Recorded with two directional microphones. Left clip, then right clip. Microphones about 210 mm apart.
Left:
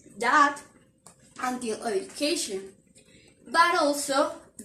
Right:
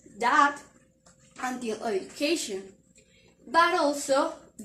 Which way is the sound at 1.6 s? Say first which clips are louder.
Left 1 dB; 25° right (ahead or behind).